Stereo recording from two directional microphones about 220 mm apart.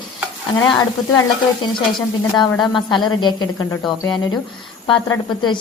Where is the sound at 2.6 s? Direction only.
20° left (ahead or behind).